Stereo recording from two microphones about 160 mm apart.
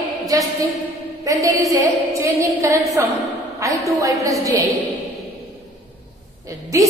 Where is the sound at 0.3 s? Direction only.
20° right (ahead or behind).